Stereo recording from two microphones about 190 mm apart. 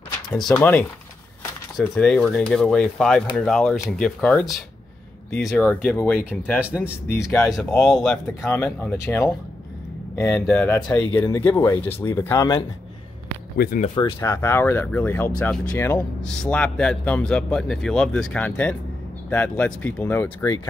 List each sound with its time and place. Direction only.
0.3 s a man's voice: 5° left (ahead or behind)
11.0 s speech: 20° left (ahead or behind)
13.9 s a man's voice: 15° left (ahead or behind)